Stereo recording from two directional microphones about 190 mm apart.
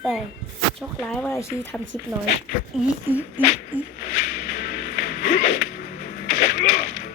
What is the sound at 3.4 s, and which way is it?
Speech, 10° right (ahead or behind).